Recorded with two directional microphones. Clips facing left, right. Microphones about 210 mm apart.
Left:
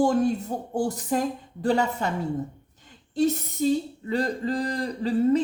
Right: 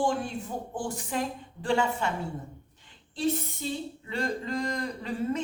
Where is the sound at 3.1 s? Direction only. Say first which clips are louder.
Left 6 dB; 40° left (ahead or behind).